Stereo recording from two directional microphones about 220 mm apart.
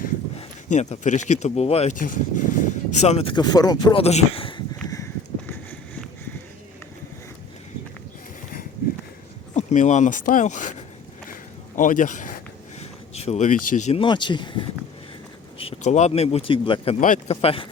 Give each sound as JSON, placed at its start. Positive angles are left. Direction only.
{"t": 0.3, "sound": "speech", "side_deg": 30}
{"t": 9.6, "sound": "speech", "side_deg": 30}
{"t": 12.8, "sound": "a sound", "side_deg": 30}
{"t": 13.7, "sound": "speech", "side_deg": 30}